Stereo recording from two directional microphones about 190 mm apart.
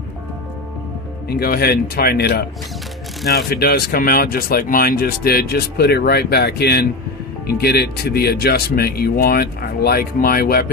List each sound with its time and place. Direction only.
1.2 s speech: 55° left (ahead or behind)